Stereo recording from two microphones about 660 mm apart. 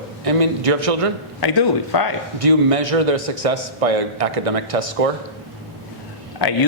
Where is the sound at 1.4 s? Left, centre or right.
Left.